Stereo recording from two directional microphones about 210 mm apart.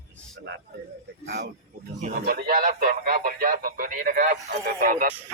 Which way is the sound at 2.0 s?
45° right (ahead or behind).